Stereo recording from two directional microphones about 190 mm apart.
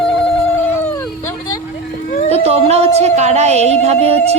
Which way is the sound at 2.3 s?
30° right (ahead or behind).